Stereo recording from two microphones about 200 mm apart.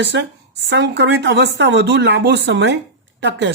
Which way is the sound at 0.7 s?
60° right (ahead or behind).